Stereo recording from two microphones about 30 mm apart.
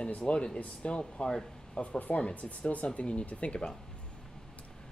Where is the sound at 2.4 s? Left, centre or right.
Left.